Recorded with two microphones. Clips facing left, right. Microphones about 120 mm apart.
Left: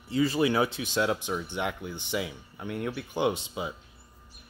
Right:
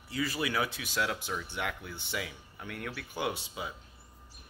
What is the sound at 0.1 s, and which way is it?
Speech, 25° left (ahead or behind).